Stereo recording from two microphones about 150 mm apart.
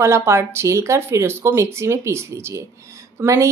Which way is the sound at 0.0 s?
20° right (ahead or behind).